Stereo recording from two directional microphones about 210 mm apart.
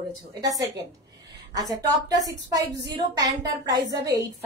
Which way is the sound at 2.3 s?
15° right (ahead or behind).